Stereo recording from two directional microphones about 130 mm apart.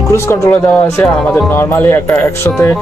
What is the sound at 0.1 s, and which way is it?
Speech, 20° left (ahead or behind).